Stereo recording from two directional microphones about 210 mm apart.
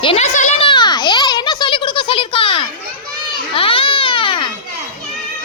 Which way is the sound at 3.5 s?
25° left (ahead or behind).